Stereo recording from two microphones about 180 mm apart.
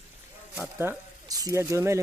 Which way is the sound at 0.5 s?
10° right (ahead or behind).